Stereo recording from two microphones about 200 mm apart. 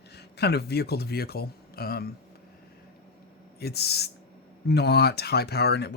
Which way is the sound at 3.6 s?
55° left (ahead or behind).